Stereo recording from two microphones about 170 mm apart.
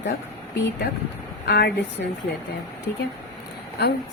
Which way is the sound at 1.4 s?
75° left (ahead or behind).